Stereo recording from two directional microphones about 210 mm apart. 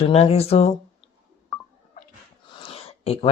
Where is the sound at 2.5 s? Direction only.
25° left (ahead or behind).